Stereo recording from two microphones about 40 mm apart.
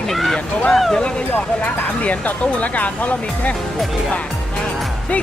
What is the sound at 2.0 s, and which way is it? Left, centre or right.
Speech, left.